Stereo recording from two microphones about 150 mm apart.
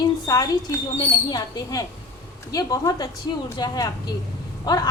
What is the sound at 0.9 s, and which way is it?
A woman's voice, 25° left (ahead or behind).